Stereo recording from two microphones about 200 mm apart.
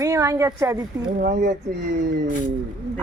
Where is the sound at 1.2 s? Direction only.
55° right (ahead or behind).